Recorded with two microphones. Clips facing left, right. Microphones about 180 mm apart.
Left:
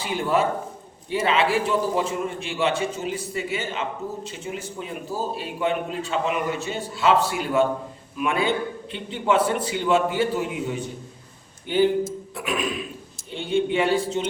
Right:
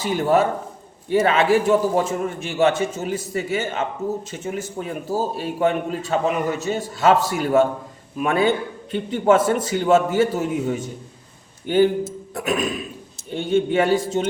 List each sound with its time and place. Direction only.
0.0 s a man's voice: 40° right (ahead or behind)